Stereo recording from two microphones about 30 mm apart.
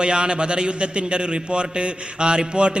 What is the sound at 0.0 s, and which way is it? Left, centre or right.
A man's voice, right.